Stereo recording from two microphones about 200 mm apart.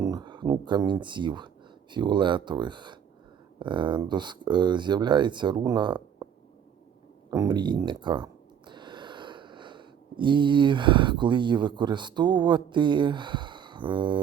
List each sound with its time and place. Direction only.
0.0 s speech: 20° right (ahead or behind)
7.3 s speech: 20° right (ahead or behind)